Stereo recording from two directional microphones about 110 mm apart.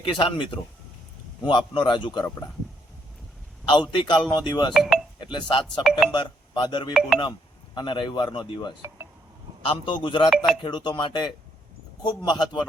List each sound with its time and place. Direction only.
0.1 s speech: 50° left (ahead or behind)
3.7 s speech: 45° left (ahead or behind)
4.7 s speech: 5° right (ahead or behind)
5.2 s speech: 45° left (ahead or behind)
5.8 s speech: 5° right (ahead or behind)
6.1 s speech: 45° left (ahead or behind)
10.2 s speech: centre (ahead or behind)
10.6 s a man's voice: 40° left (ahead or behind)